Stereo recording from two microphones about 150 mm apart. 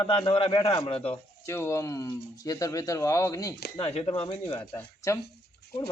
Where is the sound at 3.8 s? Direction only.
40° left (ahead or behind).